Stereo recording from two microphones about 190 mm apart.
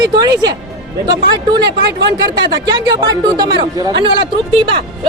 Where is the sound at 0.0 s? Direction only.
20° right (ahead or behind).